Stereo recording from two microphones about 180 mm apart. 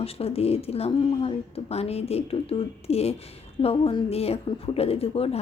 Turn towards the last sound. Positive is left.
turn(degrees=35)  # may be behind; listen again after turning